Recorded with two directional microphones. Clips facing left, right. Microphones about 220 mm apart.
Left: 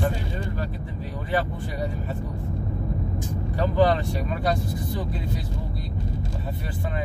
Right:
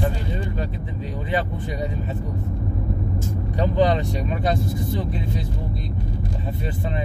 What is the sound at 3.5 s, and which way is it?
Speech, 20° right (ahead or behind).